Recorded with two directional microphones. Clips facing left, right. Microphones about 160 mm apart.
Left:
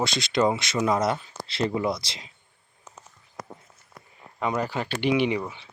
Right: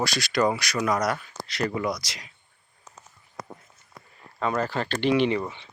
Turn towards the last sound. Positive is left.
turn(degrees=5)  # may be behind; listen again after turning